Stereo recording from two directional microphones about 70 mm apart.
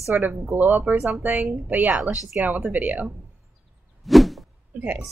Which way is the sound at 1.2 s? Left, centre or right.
Right.